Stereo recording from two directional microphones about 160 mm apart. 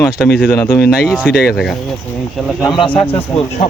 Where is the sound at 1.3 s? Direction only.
75° left (ahead or behind).